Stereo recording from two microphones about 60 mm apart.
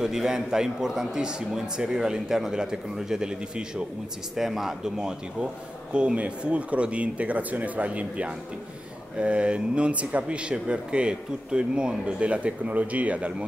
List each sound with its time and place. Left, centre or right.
0.0 s a man's voice: centre
4.4 s a man's voice: centre; by 13.5 s right